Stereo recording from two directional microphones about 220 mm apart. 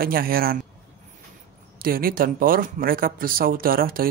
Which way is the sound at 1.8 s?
40° right (ahead or behind).